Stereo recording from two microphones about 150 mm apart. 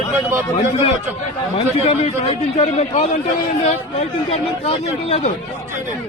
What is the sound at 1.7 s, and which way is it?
A man's voice, 45° left (ahead or behind).